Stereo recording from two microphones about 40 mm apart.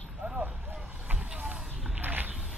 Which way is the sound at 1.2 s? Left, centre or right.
Right.